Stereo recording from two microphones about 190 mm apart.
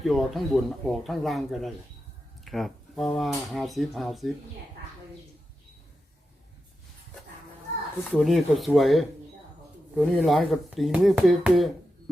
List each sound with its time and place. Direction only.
0.0 s speech: centre (ahead or behind)
8.1 s speech: centre (ahead or behind)